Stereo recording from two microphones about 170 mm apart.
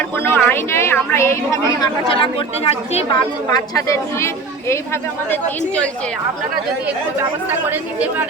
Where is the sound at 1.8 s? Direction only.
30° left (ahead or behind).